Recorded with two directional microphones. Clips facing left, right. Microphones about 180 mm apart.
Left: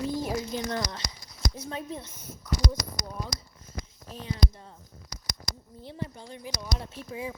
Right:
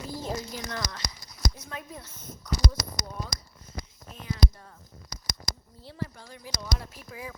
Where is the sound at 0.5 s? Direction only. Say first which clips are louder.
Left 5 dB; 30° left (ahead or behind).